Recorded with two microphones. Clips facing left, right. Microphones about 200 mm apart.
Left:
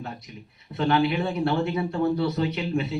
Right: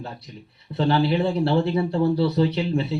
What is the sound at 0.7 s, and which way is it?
Speech, 30° right (ahead or behind).